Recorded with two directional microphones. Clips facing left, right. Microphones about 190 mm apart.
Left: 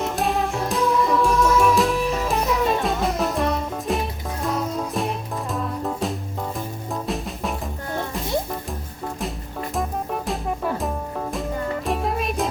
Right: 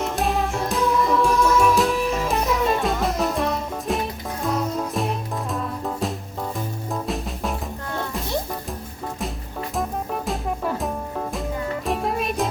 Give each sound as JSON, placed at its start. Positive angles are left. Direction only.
{"t": 0.0, "sound": "music", "side_deg": 0}
{"t": 9.7, "sound": "music", "side_deg": 0}